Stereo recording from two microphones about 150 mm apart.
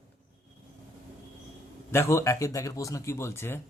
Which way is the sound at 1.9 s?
20° left (ahead or behind).